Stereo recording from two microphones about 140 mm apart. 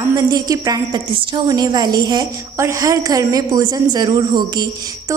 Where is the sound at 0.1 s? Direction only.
25° right (ahead or behind).